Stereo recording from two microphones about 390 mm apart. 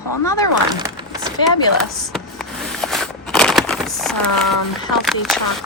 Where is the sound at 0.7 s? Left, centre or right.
Centre.